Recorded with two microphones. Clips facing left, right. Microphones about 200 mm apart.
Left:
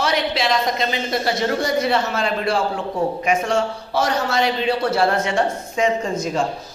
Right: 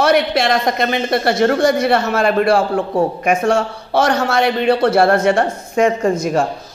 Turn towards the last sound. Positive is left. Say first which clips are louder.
# right 6 dB
turn(degrees=-55)  # may be behind; listen again after turning